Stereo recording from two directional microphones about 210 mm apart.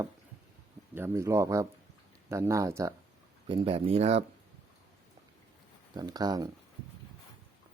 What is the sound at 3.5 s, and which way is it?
Speech, 25° right (ahead or behind).